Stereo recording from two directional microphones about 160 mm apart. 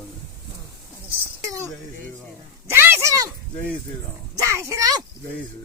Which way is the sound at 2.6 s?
15° right (ahead or behind).